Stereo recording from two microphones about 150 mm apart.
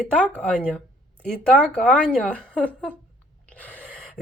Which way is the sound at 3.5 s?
10° left (ahead or behind).